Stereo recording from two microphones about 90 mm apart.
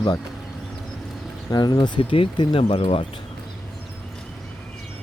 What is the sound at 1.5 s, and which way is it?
Speech, 50° left (ahead or behind).